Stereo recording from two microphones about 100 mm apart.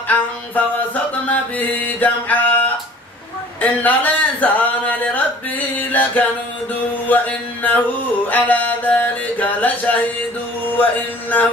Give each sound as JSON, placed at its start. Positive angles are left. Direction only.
{"t": 0.6, "sound": "music", "side_deg": 15}
{"t": 3.6, "sound": "a man's voice", "side_deg": 15}